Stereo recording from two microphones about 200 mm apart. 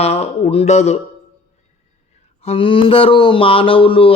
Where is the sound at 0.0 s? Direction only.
30° left (ahead or behind).